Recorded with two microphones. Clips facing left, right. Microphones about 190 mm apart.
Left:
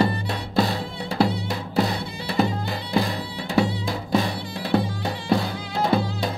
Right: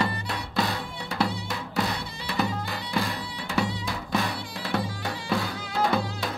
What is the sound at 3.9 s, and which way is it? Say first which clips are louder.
Music: left 6 dB; 35° left (ahead or behind).